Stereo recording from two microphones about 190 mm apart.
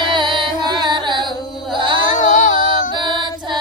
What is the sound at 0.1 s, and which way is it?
Music, 25° right (ahead or behind).